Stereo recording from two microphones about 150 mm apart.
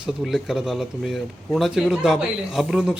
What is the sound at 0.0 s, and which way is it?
Speech, 5° right (ahead or behind).